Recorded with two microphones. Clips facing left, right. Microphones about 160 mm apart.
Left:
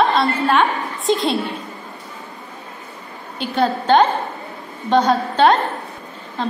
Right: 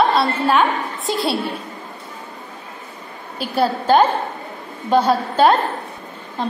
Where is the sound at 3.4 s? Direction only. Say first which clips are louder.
Even; 5° right (ahead or behind).